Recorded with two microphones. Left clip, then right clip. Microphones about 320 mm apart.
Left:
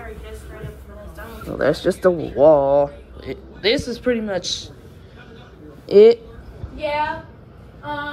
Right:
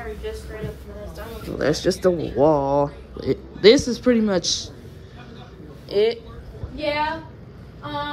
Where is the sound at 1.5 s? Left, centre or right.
Centre.